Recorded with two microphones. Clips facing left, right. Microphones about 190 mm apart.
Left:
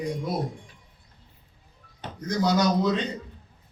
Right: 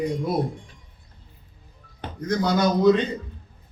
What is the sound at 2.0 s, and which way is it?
Speech, 55° right (ahead or behind).